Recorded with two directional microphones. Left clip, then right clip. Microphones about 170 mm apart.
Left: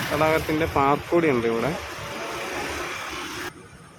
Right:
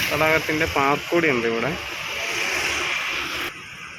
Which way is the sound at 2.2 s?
55° left (ahead or behind).